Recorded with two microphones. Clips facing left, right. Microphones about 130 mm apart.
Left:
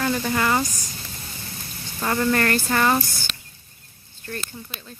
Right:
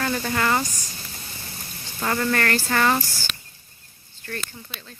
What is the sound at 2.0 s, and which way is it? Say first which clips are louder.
Speech: left 2 dB; 15° left (ahead or behind).